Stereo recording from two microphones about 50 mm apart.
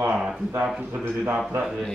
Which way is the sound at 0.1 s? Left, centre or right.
Centre.